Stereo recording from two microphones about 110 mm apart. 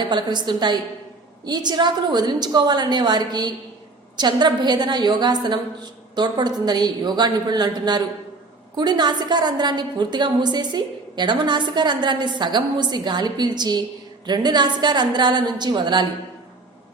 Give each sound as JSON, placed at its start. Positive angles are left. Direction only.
{"t": 0.1, "sound": "a woman's voice", "side_deg": -45}